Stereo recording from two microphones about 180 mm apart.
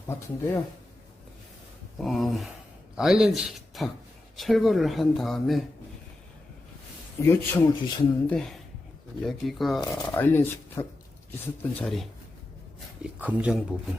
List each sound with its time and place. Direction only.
0.1 s speech: 10° left (ahead or behind)
2.0 s speech: centre (ahead or behind)
7.2 s speech: 15° left (ahead or behind)
8.4 s speech: centre (ahead or behind)
9.9 s speech: 15° left (ahead or behind)
13.0 s speech: 10° right (ahead or behind)